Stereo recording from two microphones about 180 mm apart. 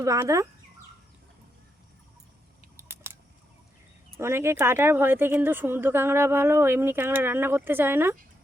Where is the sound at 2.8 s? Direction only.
10° right (ahead or behind).